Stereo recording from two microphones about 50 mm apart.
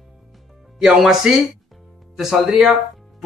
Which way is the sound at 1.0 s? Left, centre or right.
Centre.